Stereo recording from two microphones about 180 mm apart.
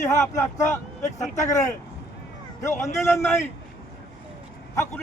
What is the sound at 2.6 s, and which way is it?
Speech, 15° left (ahead or behind).